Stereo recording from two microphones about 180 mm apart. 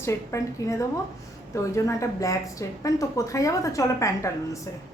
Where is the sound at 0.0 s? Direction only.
15° left (ahead or behind).